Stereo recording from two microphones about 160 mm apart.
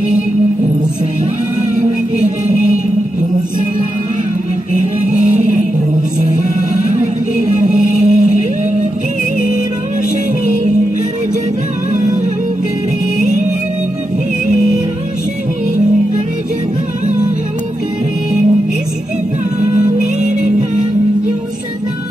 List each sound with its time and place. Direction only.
4.7 s music: 50° right (ahead or behind)
6.9 s music: 50° right (ahead or behind)